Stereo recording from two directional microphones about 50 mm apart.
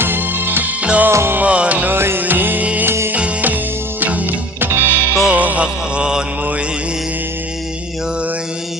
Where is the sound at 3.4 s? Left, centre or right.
Right.